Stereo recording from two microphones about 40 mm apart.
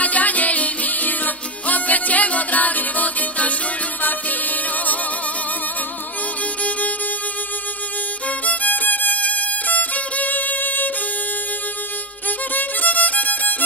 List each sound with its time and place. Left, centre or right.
0.0 s music: left
8.5 s violin: left
12.5 s violin: left